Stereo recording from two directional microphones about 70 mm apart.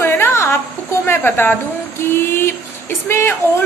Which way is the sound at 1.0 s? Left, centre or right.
Left.